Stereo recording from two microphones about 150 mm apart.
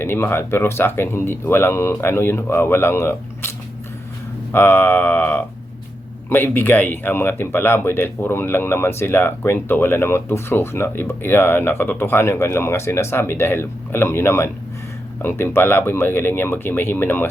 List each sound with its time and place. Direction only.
0.0 s speech: 15° left (ahead or behind)
4.5 s speech: 15° left (ahead or behind)